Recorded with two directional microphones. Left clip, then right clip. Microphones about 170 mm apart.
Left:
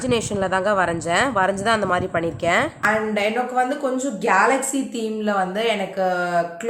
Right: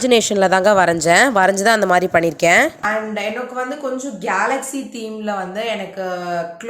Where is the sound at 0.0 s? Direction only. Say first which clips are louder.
Right 8 dB; 30° right (ahead or behind).